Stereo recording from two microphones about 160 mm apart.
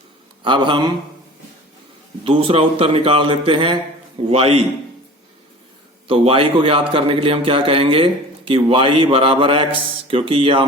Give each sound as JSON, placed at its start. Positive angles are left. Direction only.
{"t": 0.4, "sound": "speech", "side_deg": -30}
{"t": 2.2, "sound": "a man's voice", "side_deg": -35}
{"t": 6.1, "sound": "a man's voice", "side_deg": -35}